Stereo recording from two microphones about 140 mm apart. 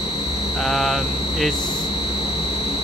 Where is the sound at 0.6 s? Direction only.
Centre (ahead or behind).